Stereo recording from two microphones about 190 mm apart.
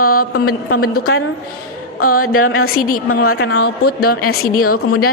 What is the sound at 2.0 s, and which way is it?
Speech, 50° left (ahead or behind).